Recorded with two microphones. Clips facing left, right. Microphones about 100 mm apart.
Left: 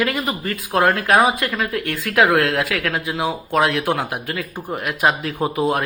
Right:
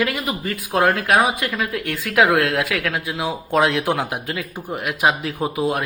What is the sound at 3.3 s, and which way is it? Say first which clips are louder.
Speech: right 1 dB; 15° right (ahead or behind).